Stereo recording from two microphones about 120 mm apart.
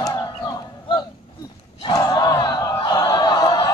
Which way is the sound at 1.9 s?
35° left (ahead or behind).